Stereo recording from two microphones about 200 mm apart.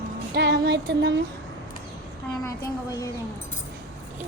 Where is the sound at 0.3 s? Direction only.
60° right (ahead or behind).